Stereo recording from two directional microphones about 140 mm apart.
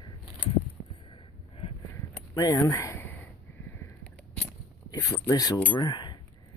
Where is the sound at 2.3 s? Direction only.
25° left (ahead or behind).